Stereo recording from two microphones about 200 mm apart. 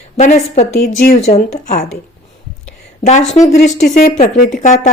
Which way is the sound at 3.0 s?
35° left (ahead or behind).